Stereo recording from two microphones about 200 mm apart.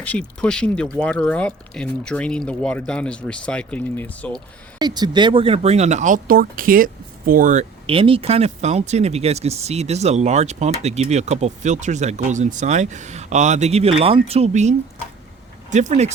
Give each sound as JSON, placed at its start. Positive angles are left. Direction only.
{"t": 0.0, "sound": "speech", "side_deg": 5}
{"t": 4.8, "sound": "speech", "side_deg": -20}
{"t": 7.9, "sound": "speech", "side_deg": -25}